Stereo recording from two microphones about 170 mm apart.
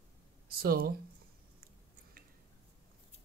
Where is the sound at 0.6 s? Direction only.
60° right (ahead or behind).